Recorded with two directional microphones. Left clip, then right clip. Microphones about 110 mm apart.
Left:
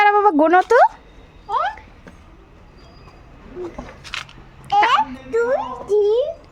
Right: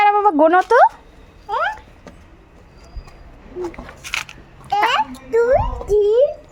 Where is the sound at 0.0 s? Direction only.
40° left (ahead or behind).